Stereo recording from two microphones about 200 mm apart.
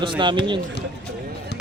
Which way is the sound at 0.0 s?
25° right (ahead or behind).